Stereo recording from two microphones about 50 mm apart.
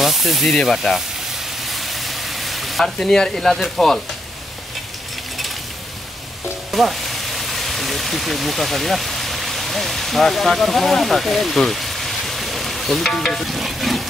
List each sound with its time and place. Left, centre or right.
0.0 s speech: centre
1.6 s sizzle: centre
2.8 s speech: centre
6.7 s speech: centre